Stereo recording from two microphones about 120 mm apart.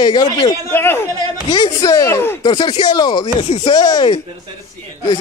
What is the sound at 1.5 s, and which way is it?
Speech, 30° left (ahead or behind).